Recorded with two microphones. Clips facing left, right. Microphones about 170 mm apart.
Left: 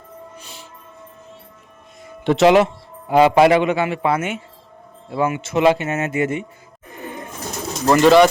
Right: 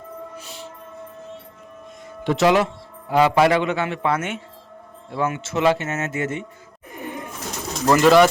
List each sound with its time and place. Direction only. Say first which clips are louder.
0.3 s music: right 4 dB; centre (ahead or behind)
2.2 s a man's voice: left 4 dB; 25° left (ahead or behind)
7.9 s speech: left 2 dB; centre (ahead or behind)